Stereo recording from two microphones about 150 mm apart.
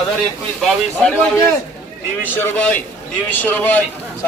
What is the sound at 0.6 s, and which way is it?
A man's voice, 5° left (ahead or behind).